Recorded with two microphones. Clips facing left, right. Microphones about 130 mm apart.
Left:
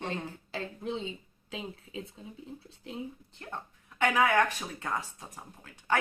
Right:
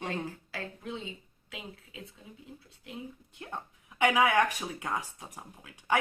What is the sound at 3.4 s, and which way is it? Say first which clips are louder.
Speech: right 1 dB; 15° right (ahead or behind).